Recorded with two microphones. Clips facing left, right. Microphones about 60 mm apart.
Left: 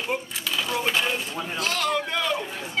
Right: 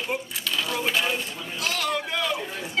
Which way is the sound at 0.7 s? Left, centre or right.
Centre.